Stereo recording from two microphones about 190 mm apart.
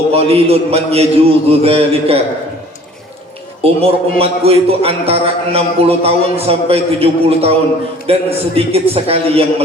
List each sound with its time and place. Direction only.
0.1 s a man's voice: 30° right (ahead or behind)
3.6 s a man's voice: 30° right (ahead or behind)